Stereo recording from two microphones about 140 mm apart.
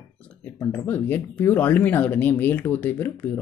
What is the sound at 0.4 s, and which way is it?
Speech, 10° left (ahead or behind).